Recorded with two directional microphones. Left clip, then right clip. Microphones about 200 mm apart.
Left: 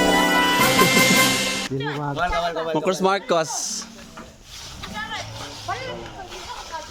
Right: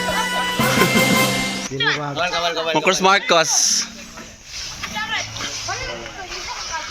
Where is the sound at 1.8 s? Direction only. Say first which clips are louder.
Right 8 dB; 40° left (ahead or behind).